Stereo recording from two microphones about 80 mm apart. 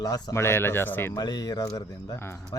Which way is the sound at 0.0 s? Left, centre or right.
Left.